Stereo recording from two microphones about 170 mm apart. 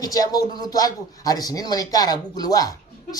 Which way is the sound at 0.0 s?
20° left (ahead or behind).